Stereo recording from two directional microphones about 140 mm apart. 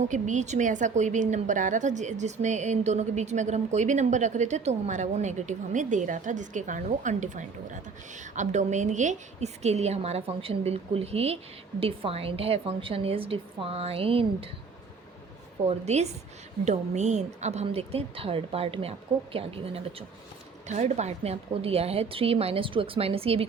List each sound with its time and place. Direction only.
0.0 s a woman's voice: 60° right (ahead or behind); by 14.5 s 40° right (ahead or behind)
15.6 s a woman's voice: 50° right (ahead or behind)
20.7 s a woman's voice: 55° right (ahead or behind)